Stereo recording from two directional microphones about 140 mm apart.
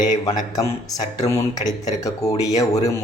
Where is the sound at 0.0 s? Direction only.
60° left (ahead or behind).